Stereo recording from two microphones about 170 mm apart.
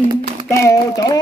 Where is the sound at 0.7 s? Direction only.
20° left (ahead or behind).